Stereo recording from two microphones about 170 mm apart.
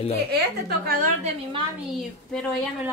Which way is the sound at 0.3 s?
65° right (ahead or behind).